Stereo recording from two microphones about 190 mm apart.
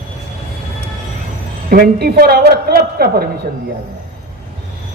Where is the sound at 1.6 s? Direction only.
50° right (ahead or behind).